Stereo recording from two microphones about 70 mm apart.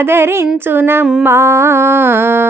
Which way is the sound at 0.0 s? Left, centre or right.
Right.